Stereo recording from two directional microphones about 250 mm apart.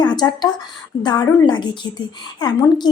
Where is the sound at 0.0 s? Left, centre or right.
Centre.